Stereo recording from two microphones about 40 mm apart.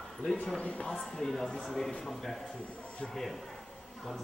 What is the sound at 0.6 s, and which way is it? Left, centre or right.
Speech, left.